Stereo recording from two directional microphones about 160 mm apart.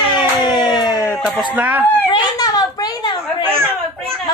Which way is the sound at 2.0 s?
25° left (ahead or behind).